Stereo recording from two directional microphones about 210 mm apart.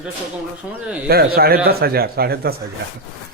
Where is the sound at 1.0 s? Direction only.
45° right (ahead or behind).